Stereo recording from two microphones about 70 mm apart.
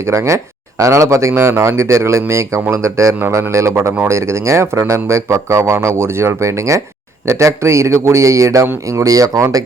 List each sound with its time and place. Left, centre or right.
0.0 s speech: right
3.2 s speech: right
3.5 s speech: right